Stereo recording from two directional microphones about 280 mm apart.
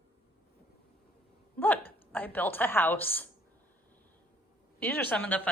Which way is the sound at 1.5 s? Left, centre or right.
Centre.